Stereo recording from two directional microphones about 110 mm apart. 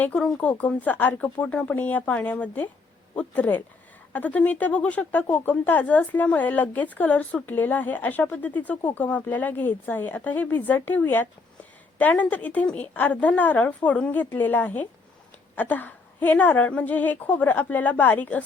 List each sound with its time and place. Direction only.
0.3 s speech: 15° left (ahead or behind)